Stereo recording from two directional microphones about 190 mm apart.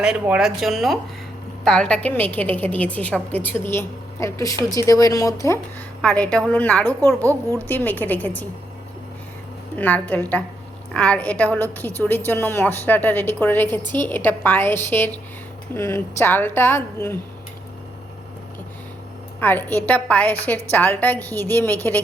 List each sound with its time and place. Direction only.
0.0 s a woman's voice: 5° right (ahead or behind); by 5.5 s 15° left (ahead or behind)
6.0 s a woman's voice: 5° left (ahead or behind)
9.7 s a woman's voice: 10° left (ahead or behind)
19.4 s a woman's voice: 10° left (ahead or behind)